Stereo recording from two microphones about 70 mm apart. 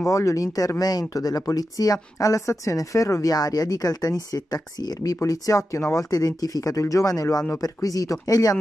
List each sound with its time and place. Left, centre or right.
0.0 s speech: left